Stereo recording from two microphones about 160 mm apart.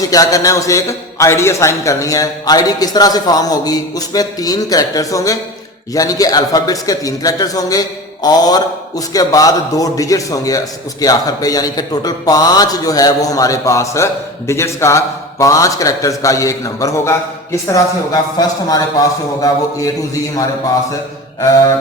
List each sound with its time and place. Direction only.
0.0 s a man's voice: 20° left (ahead or behind)